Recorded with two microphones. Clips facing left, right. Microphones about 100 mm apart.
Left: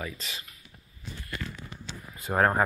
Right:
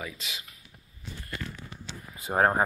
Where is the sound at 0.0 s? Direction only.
5° right (ahead or behind).